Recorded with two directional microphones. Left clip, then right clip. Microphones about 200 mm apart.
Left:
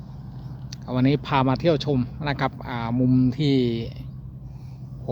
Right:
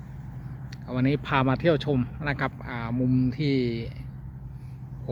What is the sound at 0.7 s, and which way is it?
Speech, 15° left (ahead or behind).